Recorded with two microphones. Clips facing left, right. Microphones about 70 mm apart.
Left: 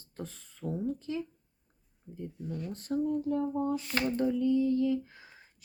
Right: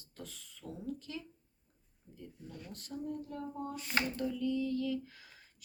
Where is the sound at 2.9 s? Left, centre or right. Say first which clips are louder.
Left 12 dB; left.